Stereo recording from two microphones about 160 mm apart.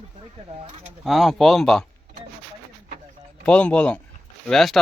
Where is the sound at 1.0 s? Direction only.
Centre (ahead or behind).